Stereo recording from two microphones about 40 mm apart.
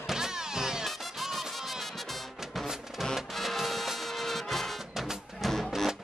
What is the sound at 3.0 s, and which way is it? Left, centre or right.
Music, centre.